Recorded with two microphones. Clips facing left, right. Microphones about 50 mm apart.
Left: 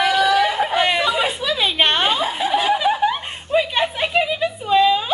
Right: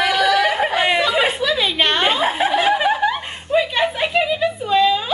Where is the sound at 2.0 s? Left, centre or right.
Right.